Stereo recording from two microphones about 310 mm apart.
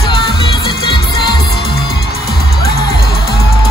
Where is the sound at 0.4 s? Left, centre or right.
Centre.